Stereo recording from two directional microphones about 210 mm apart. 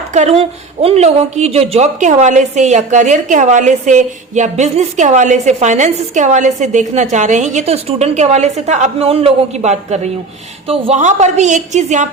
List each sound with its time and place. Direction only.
0.1 s a woman's voice: 30° right (ahead or behind)